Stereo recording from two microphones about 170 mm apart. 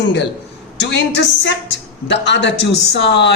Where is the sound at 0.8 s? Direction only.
90° left.